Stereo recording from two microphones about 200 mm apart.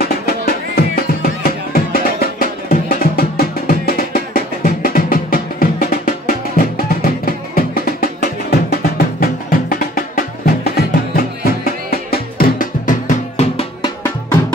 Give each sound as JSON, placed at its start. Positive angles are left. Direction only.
{"t": 0.0, "sound": "music", "side_deg": 50}